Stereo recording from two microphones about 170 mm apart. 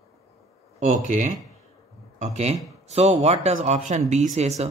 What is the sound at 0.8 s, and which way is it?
Speech, 45° right (ahead or behind).